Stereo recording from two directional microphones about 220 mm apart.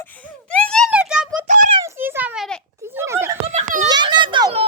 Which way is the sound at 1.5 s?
35° right (ahead or behind).